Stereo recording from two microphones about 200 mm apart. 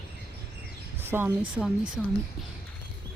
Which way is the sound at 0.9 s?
10° right (ahead or behind).